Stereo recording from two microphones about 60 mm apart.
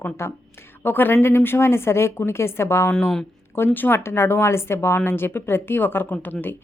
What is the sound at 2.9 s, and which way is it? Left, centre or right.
Speech, centre.